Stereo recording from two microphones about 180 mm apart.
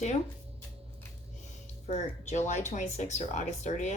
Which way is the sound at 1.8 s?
40° left (ahead or behind).